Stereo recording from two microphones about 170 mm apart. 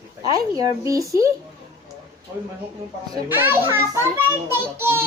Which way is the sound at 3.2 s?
10° right (ahead or behind).